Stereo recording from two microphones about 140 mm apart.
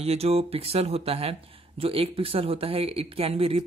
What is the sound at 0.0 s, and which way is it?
Speech, 45° right (ahead or behind).